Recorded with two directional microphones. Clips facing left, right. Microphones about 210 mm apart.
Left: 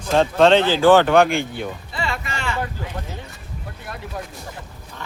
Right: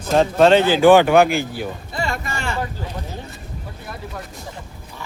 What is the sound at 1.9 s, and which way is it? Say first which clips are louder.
Music: right 4 dB; 45° right (ahead or behind).